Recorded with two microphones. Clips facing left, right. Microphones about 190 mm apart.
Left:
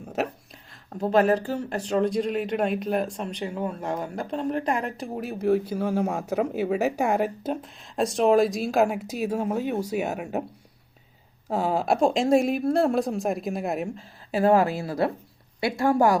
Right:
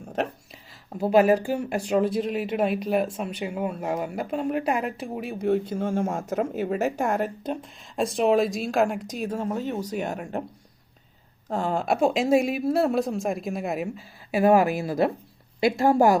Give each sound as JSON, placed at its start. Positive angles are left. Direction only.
{"t": 0.0, "sound": "a sound", "side_deg": 5}
{"t": 0.9, "sound": "speech", "side_deg": -10}
{"t": 11.4, "sound": "a woman's voice", "side_deg": 5}